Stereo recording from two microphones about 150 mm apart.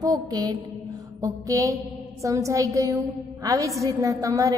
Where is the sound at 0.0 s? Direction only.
25° right (ahead or behind).